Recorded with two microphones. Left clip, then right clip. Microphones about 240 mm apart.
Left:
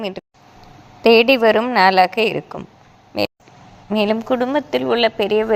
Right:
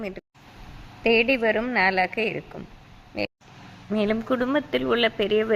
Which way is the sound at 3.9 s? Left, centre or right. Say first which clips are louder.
Left 6 dB; centre.